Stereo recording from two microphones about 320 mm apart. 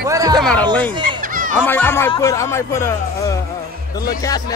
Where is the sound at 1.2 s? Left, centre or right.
Right.